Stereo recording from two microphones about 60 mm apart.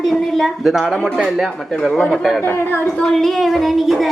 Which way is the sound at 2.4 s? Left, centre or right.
Left.